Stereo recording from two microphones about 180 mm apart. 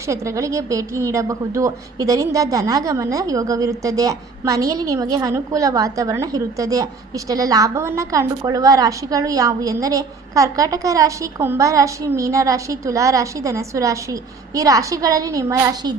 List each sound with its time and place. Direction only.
0.1 s a woman's voice: 15° right (ahead or behind)